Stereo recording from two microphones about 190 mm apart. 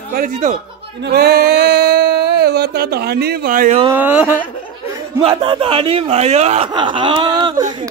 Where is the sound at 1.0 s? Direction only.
55° right (ahead or behind).